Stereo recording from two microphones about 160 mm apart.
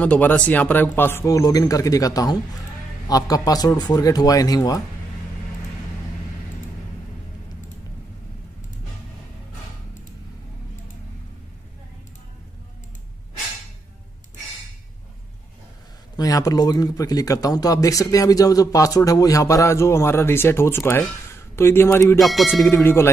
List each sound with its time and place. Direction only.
0.0 s speech: 10° left (ahead or behind)
16.2 s speech: 20° left (ahead or behind)
22.2 s music: centre (ahead or behind)
22.5 s speech: 15° left (ahead or behind)